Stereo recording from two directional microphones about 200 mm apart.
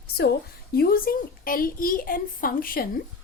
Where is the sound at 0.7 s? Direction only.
45° left (ahead or behind).